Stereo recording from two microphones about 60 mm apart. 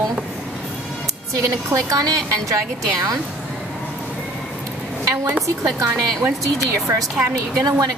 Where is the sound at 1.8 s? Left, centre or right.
Right.